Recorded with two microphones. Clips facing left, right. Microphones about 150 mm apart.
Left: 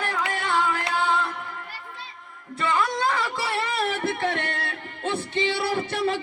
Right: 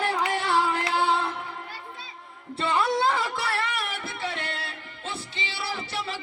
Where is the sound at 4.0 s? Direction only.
55° left (ahead or behind).